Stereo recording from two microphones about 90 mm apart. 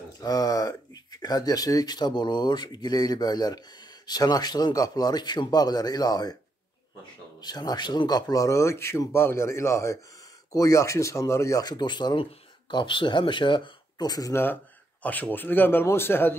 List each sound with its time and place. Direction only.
0.2 s speech: 45° left (ahead or behind)
7.4 s speech: 50° left (ahead or behind)
14.3 s speech: 25° left (ahead or behind)